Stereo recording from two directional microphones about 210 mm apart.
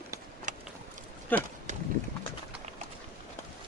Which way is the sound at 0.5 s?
35° right (ahead or behind).